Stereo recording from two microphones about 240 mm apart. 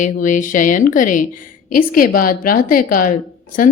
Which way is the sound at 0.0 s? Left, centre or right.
Left.